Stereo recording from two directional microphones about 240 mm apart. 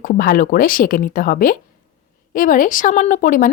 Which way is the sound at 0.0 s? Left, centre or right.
Left.